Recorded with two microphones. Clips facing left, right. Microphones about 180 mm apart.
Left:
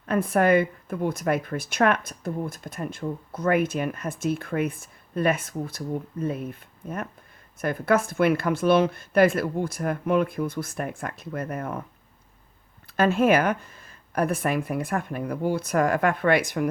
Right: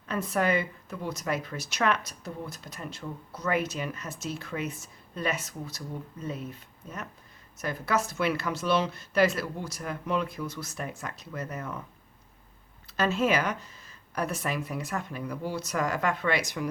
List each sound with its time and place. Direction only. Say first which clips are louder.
0.0 s a woman's voice: left 6 dB; 55° left (ahead or behind)
12.9 s a woman's voice: left 6 dB; 55° left (ahead or behind)